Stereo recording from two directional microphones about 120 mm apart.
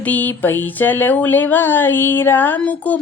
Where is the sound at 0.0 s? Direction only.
15° left (ahead or behind).